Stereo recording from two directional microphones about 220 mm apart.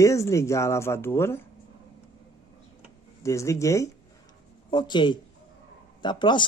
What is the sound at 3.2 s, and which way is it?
Speech, 15° left (ahead or behind).